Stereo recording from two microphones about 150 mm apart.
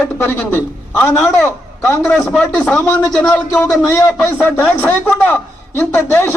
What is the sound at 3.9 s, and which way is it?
A man's voice, 20° left (ahead or behind).